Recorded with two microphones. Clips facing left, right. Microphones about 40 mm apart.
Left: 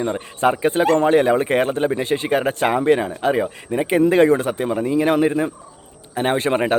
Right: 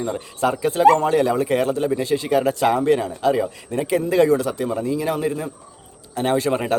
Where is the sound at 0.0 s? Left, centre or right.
Left.